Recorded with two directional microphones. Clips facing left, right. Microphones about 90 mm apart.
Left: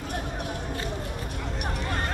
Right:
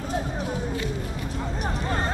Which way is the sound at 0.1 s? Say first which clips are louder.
Right 5 dB; 65° left (ahead or behind).